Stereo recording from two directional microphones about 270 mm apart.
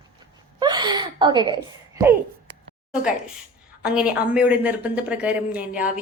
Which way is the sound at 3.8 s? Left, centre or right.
Centre.